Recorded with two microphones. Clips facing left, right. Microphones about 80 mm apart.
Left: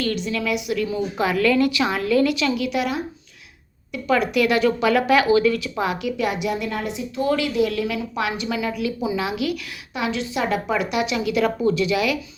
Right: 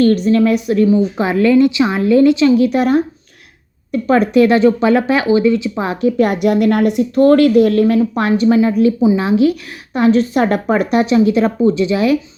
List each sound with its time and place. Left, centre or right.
0.0 s a woman's voice: right